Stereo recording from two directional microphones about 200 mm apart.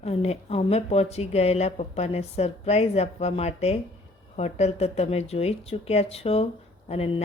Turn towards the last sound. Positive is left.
turn(degrees=30)  # may be behind; listen again after turning